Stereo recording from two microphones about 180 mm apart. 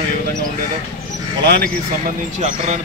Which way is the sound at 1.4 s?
55° right (ahead or behind).